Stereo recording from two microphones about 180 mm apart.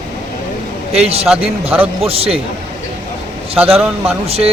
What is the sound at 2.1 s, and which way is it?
Speech, 35° right (ahead or behind).